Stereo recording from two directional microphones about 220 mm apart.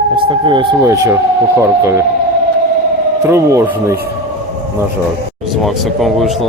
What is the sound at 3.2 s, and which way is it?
Speech, 10° right (ahead or behind).